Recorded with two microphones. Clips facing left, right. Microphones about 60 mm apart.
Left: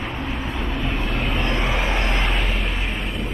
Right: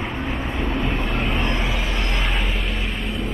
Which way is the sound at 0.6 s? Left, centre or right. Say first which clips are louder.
Right 3 dB; centre.